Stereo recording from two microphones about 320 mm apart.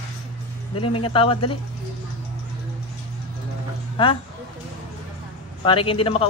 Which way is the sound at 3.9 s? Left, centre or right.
Centre.